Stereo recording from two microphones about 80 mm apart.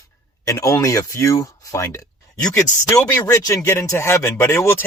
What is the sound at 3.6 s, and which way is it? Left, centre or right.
Speech, left.